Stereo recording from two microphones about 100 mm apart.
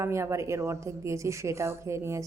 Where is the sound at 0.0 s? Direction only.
30° right (ahead or behind).